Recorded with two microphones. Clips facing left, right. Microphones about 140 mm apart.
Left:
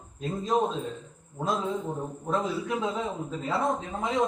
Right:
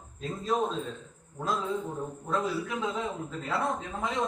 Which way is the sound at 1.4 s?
20° left (ahead or behind).